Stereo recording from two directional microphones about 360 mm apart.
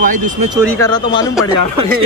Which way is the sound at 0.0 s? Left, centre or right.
Right.